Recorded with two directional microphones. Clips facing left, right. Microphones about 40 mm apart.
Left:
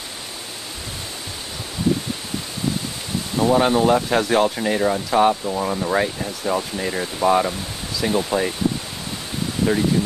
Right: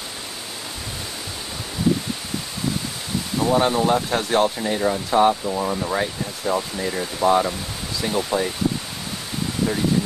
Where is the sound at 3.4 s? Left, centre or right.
Left.